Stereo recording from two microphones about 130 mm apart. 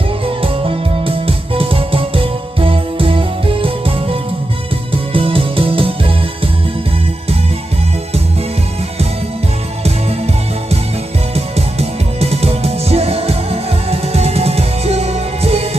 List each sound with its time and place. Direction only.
0.4 s music: 45° right (ahead or behind)
11.3 s music: 55° right (ahead or behind)